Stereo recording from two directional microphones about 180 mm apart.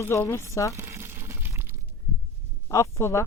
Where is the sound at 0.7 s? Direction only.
15° right (ahead or behind).